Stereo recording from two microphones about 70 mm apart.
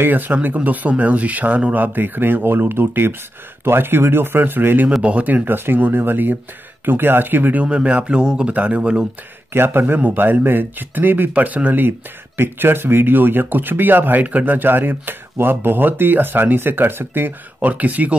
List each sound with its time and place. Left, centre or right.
0.0 s speech: right
7.6 s speech: centre
9.5 s speech: right